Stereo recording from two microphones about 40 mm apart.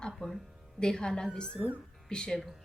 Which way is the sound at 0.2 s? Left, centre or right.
Left.